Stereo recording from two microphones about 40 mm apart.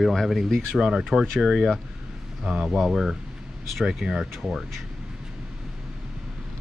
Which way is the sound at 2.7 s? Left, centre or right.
Centre.